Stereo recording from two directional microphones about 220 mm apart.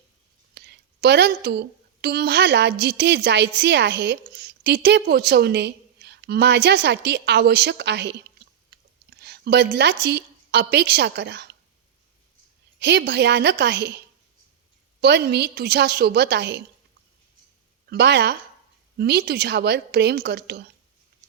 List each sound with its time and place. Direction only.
0.5 s a woman's voice: 50° right (ahead or behind)
9.2 s a woman's voice: 50° right (ahead or behind)
12.8 s a woman's voice: 50° right (ahead or behind)
15.0 s a woman's voice: 50° right (ahead or behind)
17.8 s a woman's voice: 50° right (ahead or behind)